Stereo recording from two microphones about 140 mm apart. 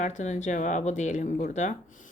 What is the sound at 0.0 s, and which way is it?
Speech, 60° left (ahead or behind).